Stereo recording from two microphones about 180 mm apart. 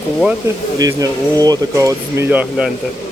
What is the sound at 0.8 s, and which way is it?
Speech, 20° right (ahead or behind).